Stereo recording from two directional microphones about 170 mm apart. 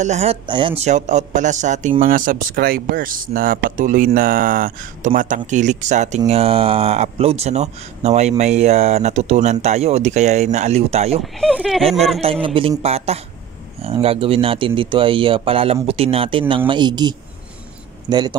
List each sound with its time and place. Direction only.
0.0 s a man's voice: 40° right (ahead or behind)
0.5 s speech: 30° right (ahead or behind)
0.8 s speech: 45° right (ahead or behind)
11.5 s a sound: centre (ahead or behind)
12.2 s a man's voice: 30° right (ahead or behind)